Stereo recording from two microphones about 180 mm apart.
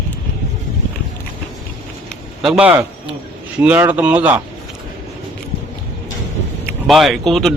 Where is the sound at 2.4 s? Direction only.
5° right (ahead or behind).